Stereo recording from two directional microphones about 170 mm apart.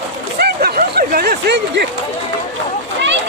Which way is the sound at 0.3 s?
65° right (ahead or behind).